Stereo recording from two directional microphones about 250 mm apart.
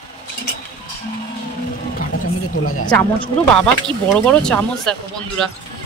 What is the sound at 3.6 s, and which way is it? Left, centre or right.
Speech, centre.